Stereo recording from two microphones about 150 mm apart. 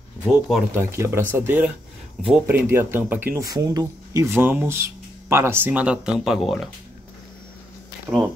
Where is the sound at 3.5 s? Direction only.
25° right (ahead or behind); by 6.6 s centre (ahead or behind).